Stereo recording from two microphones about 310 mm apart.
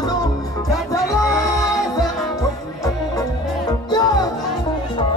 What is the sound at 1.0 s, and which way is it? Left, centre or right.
Music, centre.